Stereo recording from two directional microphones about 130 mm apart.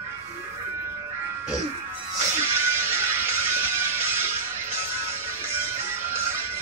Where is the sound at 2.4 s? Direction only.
20° right (ahead or behind).